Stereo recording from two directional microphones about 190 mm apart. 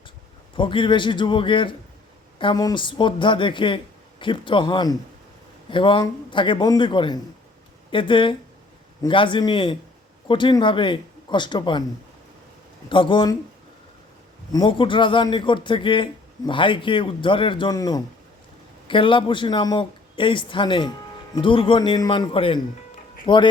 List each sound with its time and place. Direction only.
0.5 s a man's voice: 25° left (ahead or behind)
12.9 s a man's voice: 25° left (ahead or behind)
14.5 s a man's voice: 25° left (ahead or behind)